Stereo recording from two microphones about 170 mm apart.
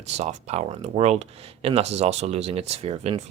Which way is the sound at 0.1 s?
40° right (ahead or behind).